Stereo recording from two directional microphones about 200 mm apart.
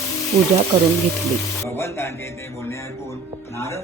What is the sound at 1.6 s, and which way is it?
Speech, 15° left (ahead or behind).